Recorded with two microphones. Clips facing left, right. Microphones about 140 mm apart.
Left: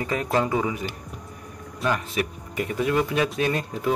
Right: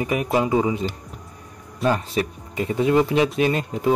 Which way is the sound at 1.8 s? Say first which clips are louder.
Right 4 dB; 30° right (ahead or behind).